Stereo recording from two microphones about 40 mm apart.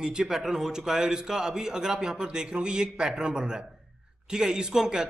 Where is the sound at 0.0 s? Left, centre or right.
Centre.